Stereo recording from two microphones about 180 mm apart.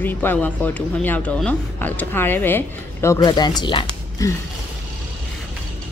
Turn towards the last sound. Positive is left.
turn(degrees=20)  # may be behind; listen again after turning